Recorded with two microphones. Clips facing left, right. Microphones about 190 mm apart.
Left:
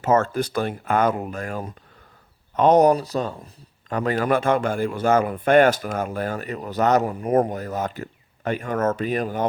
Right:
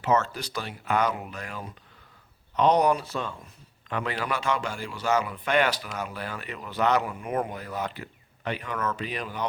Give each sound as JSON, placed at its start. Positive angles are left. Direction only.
{"t": 0.0, "sound": "speech", "side_deg": 50}